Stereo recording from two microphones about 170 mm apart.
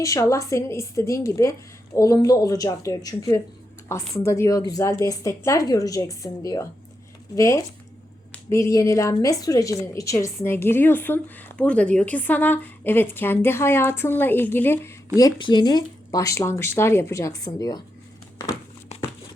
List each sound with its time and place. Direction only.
0.0 s a woman's voice: 20° left (ahead or behind)